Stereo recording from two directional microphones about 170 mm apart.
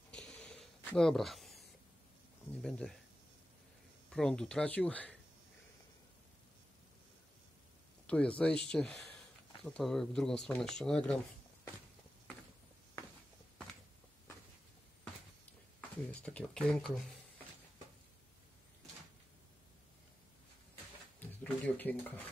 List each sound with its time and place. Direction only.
0.1 s a sound: 5° left (ahead or behind)
2.6 s speech: 5° left (ahead or behind)
4.1 s speech: 5° left (ahead or behind)
8.4 s speech: 5° left (ahead or behind)
16.1 s speech: 10° left (ahead or behind)
21.2 s speech: 10° left (ahead or behind)